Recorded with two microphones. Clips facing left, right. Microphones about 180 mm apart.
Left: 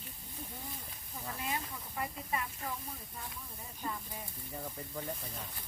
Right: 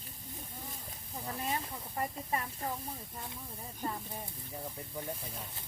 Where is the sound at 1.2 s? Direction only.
35° right (ahead or behind).